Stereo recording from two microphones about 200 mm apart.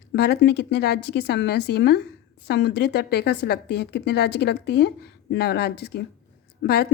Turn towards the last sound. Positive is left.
turn(degrees=55)  # may be behind; listen again after turning